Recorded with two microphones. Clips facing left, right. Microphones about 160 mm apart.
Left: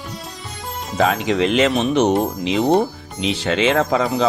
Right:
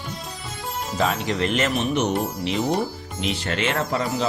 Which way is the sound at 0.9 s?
90° left.